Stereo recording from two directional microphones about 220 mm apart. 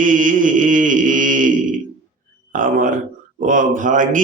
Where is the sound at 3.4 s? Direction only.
35° right (ahead or behind).